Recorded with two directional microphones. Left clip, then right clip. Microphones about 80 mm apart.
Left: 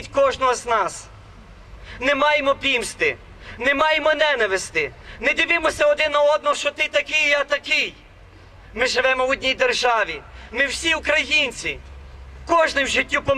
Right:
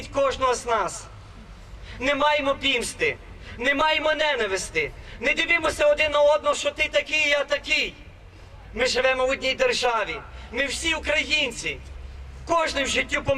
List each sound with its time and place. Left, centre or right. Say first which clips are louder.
0.0 s a man's voice: left 4 dB; left